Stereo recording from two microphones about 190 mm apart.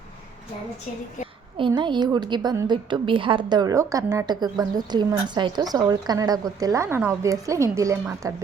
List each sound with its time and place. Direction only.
1.5 s a woman's voice: 25° right (ahead or behind)